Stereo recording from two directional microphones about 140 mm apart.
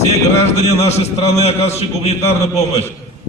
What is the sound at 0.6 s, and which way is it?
A man's voice, 50° left (ahead or behind).